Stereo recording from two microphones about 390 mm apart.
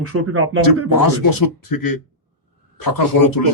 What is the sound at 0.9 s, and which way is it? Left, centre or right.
Speech, left.